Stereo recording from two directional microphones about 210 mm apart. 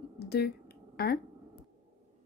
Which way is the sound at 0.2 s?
50° left (ahead or behind).